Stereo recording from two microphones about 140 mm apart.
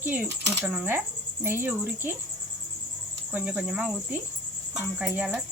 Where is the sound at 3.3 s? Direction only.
10° right (ahead or behind).